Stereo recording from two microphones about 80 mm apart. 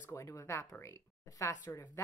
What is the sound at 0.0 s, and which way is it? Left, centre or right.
Speech, left.